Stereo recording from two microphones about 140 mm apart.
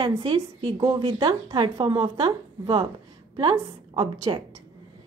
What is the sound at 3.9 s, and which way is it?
Speech, 35° right (ahead or behind).